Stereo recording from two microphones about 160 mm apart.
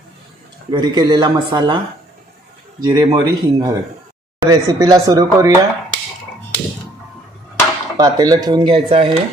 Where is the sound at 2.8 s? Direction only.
25° right (ahead or behind).